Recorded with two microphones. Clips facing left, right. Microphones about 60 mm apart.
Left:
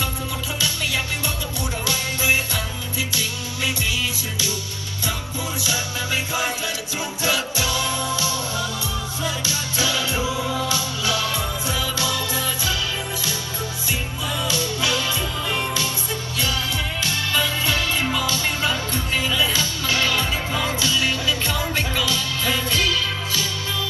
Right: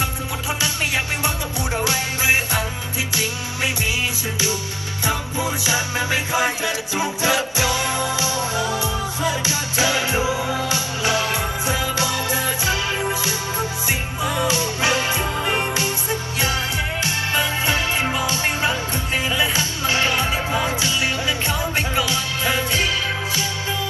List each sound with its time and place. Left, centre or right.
0.6 s music: right
5.7 s music: right